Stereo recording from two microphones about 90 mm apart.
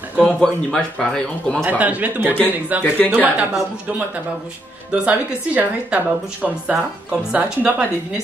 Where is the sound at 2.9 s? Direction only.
15° left (ahead or behind).